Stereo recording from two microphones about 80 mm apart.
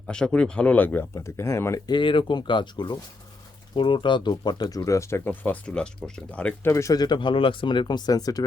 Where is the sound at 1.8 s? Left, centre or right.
Left.